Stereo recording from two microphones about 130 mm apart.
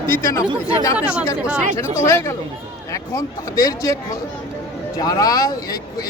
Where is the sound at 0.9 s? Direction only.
10° right (ahead or behind).